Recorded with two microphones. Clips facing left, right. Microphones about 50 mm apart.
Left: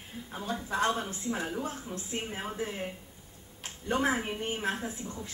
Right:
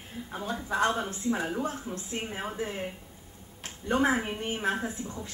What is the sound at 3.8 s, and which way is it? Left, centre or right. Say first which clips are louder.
A woman's voice: right 3 dB; centre.